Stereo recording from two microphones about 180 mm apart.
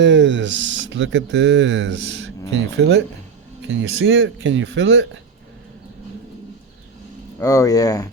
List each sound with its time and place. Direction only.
0.0 s speech: 80° right
2.5 s speech: 75° right (ahead or behind)
3.9 s speech: 90° right
7.3 s speech: 20° left (ahead or behind)